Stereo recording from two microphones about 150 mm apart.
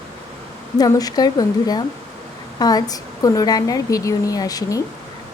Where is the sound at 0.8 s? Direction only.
25° left (ahead or behind).